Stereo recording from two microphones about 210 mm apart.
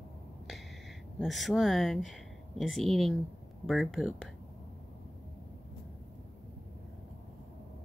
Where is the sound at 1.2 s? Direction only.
Centre (ahead or behind).